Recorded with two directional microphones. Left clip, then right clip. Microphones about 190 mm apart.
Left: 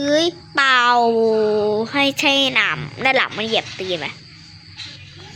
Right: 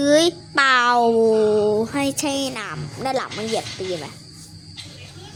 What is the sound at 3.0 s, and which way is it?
Speech, 25° left (ahead or behind).